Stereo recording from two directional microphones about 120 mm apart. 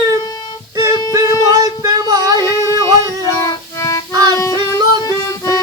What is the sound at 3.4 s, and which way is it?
Music, 30° left (ahead or behind).